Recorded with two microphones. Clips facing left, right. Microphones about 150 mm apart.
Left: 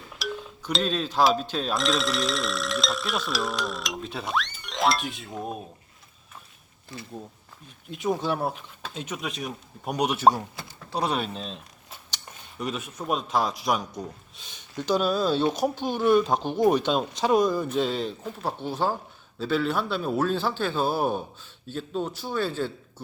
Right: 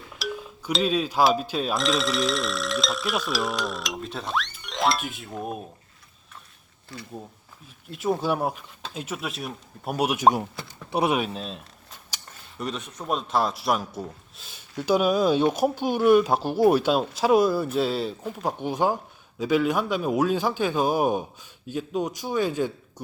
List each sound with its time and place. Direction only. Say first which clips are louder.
0.2 s speech: right 1 dB; 5° right (ahead or behind)
6.9 s speech: even; 20° left (ahead or behind)
7.9 s speech: right 2 dB; 5° right (ahead or behind)
10.9 s speech: right 4 dB; 20° right (ahead or behind)
11.2 s speech: right 2 dB; 5° right (ahead or behind)